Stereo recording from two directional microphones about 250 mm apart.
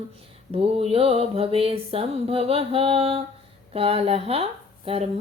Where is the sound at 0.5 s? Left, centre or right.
Right.